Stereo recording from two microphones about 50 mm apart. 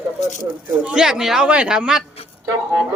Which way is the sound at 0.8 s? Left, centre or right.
Centre.